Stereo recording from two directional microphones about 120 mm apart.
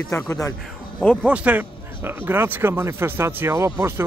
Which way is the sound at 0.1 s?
25° left (ahead or behind).